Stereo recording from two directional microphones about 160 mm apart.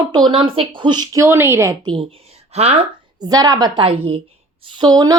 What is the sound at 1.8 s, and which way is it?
A woman's voice, 30° right (ahead or behind).